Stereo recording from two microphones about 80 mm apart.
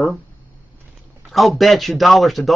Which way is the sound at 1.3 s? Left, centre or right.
Centre.